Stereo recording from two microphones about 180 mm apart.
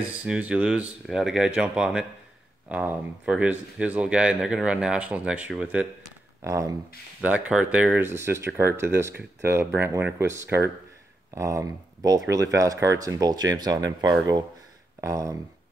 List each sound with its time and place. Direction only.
0.1 s speech: 5° right (ahead or behind)
15.0 s speech: 15° right (ahead or behind)